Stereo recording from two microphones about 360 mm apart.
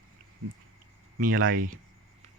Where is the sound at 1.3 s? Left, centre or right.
Right.